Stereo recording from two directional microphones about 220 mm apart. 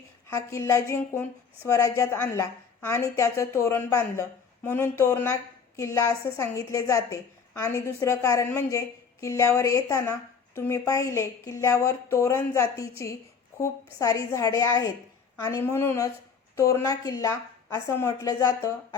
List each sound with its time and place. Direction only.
0.3 s a woman's voice: 15° left (ahead or behind)